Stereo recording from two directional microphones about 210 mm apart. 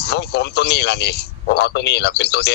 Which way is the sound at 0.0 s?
50° left (ahead or behind).